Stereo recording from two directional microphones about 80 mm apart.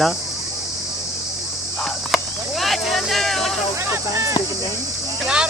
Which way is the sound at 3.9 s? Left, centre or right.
Right.